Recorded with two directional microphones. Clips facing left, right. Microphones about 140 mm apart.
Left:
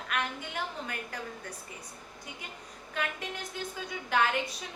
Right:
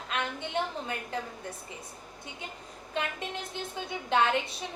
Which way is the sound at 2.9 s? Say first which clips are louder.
Right 2 dB; 25° right (ahead or behind).